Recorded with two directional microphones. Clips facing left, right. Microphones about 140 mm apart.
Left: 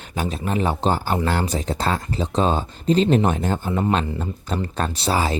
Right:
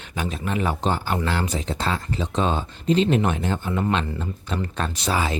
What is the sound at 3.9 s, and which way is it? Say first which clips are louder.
Speech: left 2 dB; 40° left (ahead or behind).